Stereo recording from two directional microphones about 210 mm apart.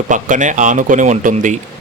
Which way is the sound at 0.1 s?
35° right (ahead or behind).